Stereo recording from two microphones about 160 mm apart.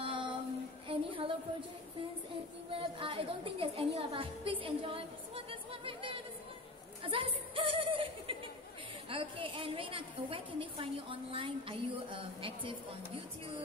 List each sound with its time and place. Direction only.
0.0 s female singing: 30° right (ahead or behind)
0.8 s a sound: 35° right (ahead or behind)
2.7 s a woman's voice: 35° right (ahead or behind)
7.0 s music: 35° right (ahead or behind)
9.1 s a woman's voice: 35° right (ahead or behind)